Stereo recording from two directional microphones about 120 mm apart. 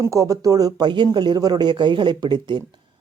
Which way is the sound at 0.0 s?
25° right (ahead or behind).